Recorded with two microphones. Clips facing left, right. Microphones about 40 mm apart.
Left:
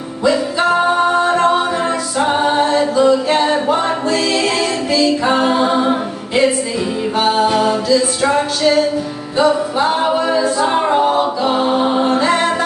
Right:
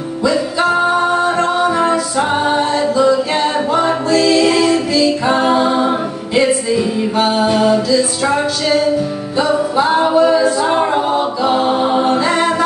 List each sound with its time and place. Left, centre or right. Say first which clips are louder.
0.7 s singing: left 1 dB; centre
1.2 s music: left 2 dB; centre
1.8 s music: right 3 dB; centre
5.4 s a capella: right 1 dB; centre
7.2 s music: even; centre
9.8 s music: right 1 dB; centre
10.2 s a capella: right 3 dB; centre
11.5 s music: right 2 dB; centre
12.3 s a capella: even; centre